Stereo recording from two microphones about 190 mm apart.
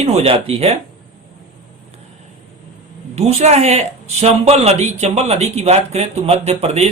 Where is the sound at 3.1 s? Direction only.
35° right (ahead or behind).